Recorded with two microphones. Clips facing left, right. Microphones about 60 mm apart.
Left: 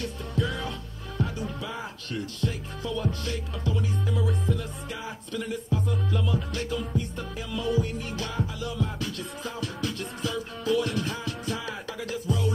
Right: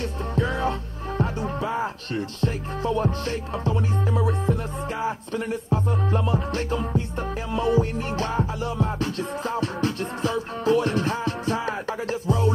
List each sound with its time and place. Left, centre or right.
0.0 s music: right